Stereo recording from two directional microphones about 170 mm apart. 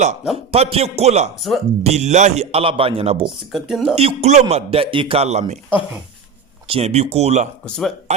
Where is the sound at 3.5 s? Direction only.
Centre (ahead or behind).